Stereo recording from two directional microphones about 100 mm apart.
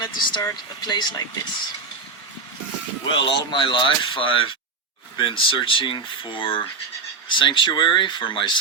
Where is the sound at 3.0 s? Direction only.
55° left (ahead or behind).